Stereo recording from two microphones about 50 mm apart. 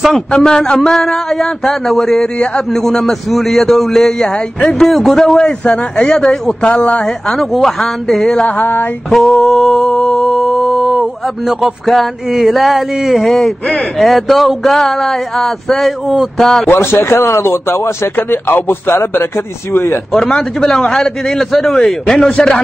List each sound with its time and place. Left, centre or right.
0.1 s a man's voice: centre
2.3 s speech: centre
2.8 s a man's voice: centre
5.4 s a man's voice: centre
6.7 s speech: left
7.1 s a man's voice: centre
8.5 s a sound: left
9.1 s a man's voice: centre
9.4 s a sound: centre
11.4 s a man's voice: centre
16.6 s speech: left
18.1 s speech: left
20.1 s a man's voice: centre